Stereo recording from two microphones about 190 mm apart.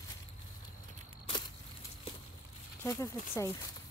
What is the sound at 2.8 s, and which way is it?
Speech, 15° left (ahead or behind).